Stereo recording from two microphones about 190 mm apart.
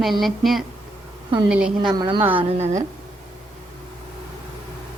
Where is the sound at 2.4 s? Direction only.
35° right (ahead or behind).